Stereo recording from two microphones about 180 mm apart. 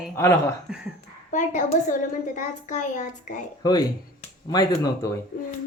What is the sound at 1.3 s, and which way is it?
A child's voice, 40° left (ahead or behind).